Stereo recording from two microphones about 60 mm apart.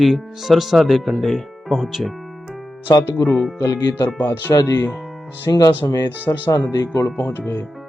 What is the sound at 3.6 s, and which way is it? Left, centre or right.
Speech, left.